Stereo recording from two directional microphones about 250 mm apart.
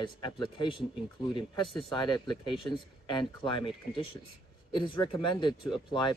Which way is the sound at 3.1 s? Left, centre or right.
Centre.